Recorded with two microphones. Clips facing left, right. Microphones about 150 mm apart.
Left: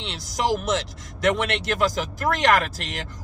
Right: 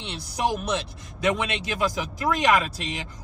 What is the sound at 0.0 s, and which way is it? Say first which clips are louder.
A woman's voice: left 1 dB; 75° left (ahead or behind).